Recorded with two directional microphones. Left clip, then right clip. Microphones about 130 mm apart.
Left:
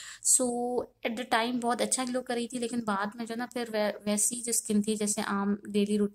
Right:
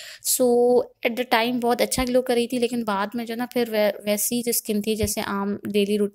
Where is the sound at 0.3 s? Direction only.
20° right (ahead or behind).